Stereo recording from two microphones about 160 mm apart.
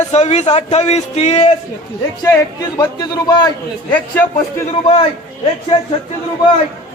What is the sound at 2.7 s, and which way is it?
Speech, 25° left (ahead or behind).